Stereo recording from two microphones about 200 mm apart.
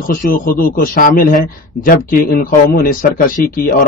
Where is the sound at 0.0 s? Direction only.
45° left (ahead or behind).